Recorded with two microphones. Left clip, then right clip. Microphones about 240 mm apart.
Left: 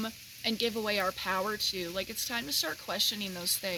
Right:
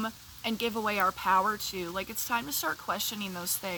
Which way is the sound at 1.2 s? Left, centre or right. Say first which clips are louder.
Right 5 dB; centre.